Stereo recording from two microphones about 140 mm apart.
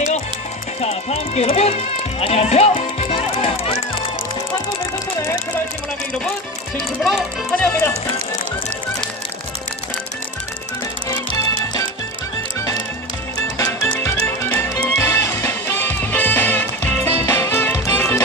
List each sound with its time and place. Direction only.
0.7 s speech: 50° left (ahead or behind)
7.0 s speech: centre (ahead or behind)
7.5 s speech: 15° left (ahead or behind)
11.1 s music: 25° left (ahead or behind)
13.6 s music: 20° left (ahead or behind)